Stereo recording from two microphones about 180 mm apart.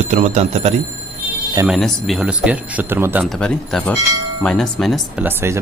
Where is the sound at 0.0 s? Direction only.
40° right (ahead or behind).